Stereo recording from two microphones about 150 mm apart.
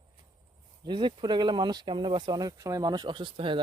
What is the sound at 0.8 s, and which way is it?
Speech, 30° right (ahead or behind).